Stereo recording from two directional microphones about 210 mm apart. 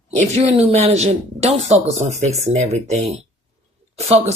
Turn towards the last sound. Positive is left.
turn(degrees=-30)  # may be behind; listen again after turning